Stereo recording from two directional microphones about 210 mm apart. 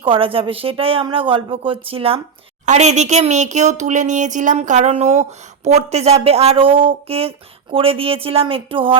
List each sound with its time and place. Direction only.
0.0 s speech: 25° right (ahead or behind)